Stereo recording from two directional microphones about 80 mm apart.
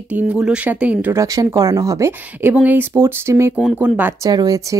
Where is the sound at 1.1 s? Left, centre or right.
Right.